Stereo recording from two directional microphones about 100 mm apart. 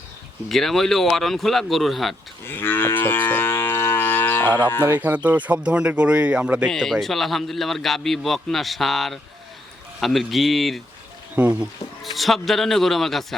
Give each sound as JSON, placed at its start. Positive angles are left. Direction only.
{"t": 0.4, "sound": "a man's voice", "side_deg": 5}
{"t": 2.4, "sound": "moo", "side_deg": 20}
{"t": 4.9, "sound": "speech", "side_deg": -15}
{"t": 6.7, "sound": "a man's voice", "side_deg": 0}
{"t": 11.3, "sound": "speech", "side_deg": -15}
{"t": 12.1, "sound": "a man's voice", "side_deg": 0}